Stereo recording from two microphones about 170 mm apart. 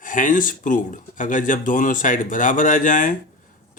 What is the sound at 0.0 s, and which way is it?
Speech, 50° left (ahead or behind).